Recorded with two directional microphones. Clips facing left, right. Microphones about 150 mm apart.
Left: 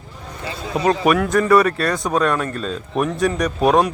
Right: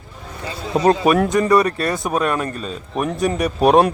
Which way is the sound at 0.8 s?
30° right (ahead or behind).